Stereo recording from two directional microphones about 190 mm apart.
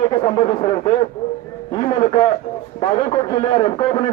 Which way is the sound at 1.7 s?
25° left (ahead or behind).